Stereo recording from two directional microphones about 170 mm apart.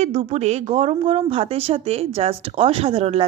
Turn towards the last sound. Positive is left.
turn(degrees=-35)  # may be behind; listen again after turning